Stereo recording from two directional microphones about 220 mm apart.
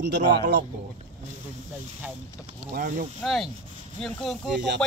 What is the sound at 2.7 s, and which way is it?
Speech, 35° right (ahead or behind).